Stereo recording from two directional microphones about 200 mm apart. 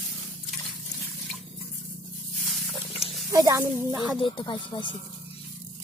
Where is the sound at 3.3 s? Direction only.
15° right (ahead or behind).